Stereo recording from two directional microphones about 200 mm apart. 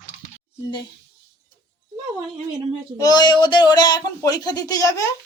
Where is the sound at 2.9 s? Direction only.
20° left (ahead or behind).